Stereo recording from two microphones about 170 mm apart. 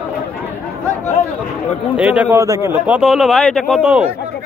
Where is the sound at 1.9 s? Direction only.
5° right (ahead or behind).